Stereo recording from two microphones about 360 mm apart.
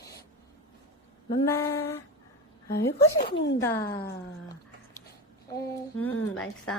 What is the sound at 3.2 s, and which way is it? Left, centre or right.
Speech, left.